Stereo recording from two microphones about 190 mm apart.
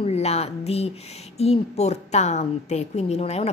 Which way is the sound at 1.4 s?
35° left (ahead or behind).